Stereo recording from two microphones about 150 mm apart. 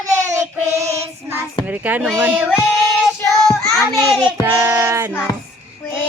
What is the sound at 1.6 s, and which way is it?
Speech, 10° right (ahead or behind).